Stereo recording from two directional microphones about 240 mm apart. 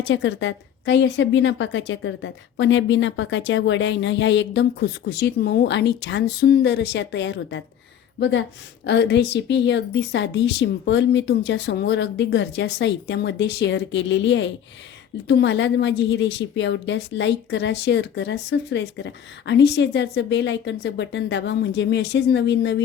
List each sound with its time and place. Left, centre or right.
0.0 s a woman's voice: left